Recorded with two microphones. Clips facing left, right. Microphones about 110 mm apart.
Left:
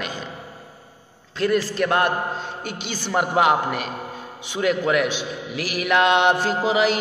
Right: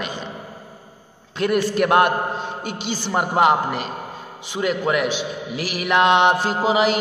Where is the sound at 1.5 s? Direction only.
15° right (ahead or behind).